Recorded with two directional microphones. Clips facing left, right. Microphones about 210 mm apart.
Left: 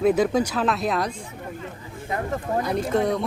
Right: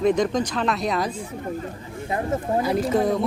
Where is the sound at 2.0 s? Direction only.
20° right (ahead or behind).